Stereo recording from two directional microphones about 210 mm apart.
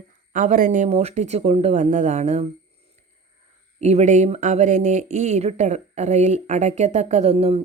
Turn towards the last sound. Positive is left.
turn(degrees=-30)  # may be behind; listen again after turning